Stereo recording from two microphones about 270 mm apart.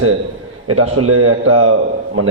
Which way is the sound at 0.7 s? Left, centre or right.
Right.